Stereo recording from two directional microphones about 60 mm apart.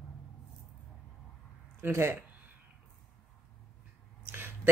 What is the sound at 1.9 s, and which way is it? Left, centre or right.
Speech, right.